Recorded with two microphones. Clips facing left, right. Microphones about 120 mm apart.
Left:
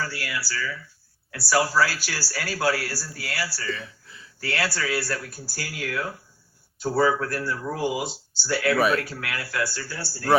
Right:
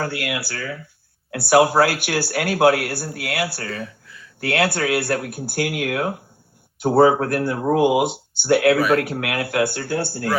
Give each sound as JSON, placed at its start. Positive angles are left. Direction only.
{"t": 0.0, "sound": "speech", "side_deg": -55}